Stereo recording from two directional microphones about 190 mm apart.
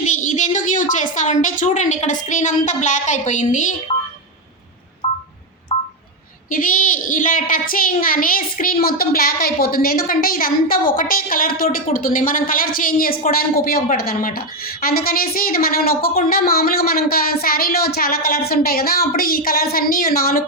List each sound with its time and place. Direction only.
0.0 s a woman's voice: 40° left (ahead or behind)
5.0 s telephone dialing: 30° left (ahead or behind)
6.5 s a woman's voice: 45° left (ahead or behind)